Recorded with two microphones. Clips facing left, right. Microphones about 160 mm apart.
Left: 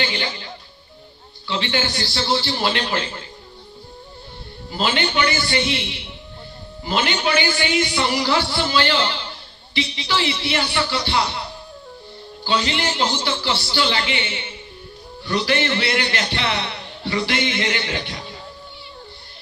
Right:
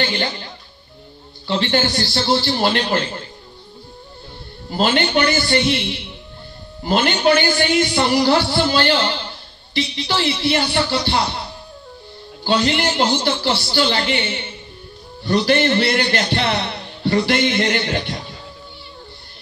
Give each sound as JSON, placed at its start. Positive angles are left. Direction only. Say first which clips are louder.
{"t": 0.0, "sound": "a man's voice", "louder": "right 3 dB", "side_deg": -45}
{"t": 1.5, "sound": "a man's voice", "louder": "right 5 dB", "side_deg": -45}
{"t": 4.6, "sound": "a man's voice", "louder": "right 4 dB", "side_deg": -50}
{"t": 12.4, "sound": "a man's voice", "louder": "right 4 dB", "side_deg": -50}